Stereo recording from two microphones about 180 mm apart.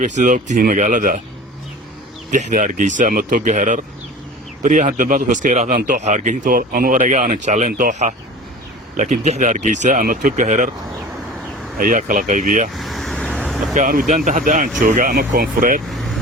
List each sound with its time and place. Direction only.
0.0 s speech: 45° right (ahead or behind)
2.3 s speech: 45° right (ahead or behind)
11.8 s speech: 50° right (ahead or behind)
12.7 s vehicle: centre (ahead or behind)
13.7 s speech: 45° right (ahead or behind)